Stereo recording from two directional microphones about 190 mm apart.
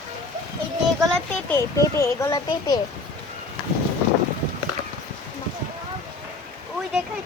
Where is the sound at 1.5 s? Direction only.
15° left (ahead or behind).